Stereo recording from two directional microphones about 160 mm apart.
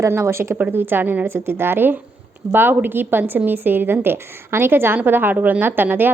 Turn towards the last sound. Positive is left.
turn(degrees=-10)  # may be behind; listen again after turning